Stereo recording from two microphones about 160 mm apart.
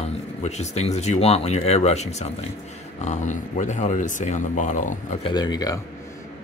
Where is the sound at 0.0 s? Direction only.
45° left (ahead or behind).